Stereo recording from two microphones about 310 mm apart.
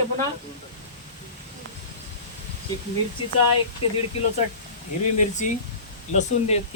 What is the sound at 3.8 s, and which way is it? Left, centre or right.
Speech, left.